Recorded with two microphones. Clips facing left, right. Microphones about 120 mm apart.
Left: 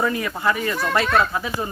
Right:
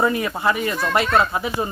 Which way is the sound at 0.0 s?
25° right (ahead or behind).